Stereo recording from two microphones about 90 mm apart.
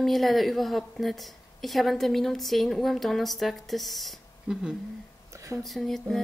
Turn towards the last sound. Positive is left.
turn(degrees=5)  # may be behind; listen again after turning